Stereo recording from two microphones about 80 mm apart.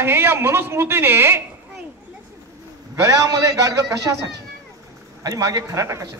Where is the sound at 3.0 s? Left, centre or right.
Right.